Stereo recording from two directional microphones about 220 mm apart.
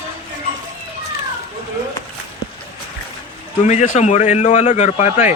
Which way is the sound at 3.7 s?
30° left (ahead or behind).